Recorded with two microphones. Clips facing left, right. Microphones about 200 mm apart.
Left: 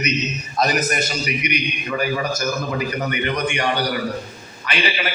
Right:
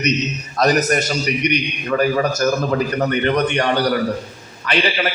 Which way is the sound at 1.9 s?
45° right (ahead or behind).